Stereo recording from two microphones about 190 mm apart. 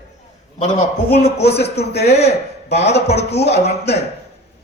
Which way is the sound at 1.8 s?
60° left (ahead or behind).